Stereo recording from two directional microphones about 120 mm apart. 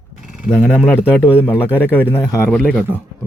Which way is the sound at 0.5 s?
15° left (ahead or behind).